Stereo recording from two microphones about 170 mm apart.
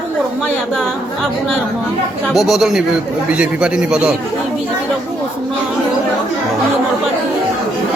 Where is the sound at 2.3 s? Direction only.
Centre (ahead or behind).